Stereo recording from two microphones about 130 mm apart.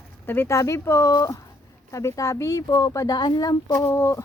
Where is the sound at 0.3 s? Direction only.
20° left (ahead or behind).